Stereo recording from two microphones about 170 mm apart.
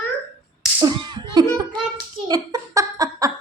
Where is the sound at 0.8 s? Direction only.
25° right (ahead or behind).